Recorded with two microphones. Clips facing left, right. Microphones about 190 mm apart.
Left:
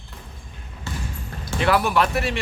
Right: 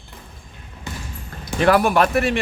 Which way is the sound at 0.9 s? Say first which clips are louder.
Even; 15° right (ahead or behind).